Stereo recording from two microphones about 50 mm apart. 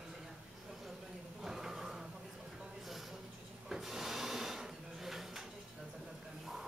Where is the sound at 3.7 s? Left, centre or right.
Centre.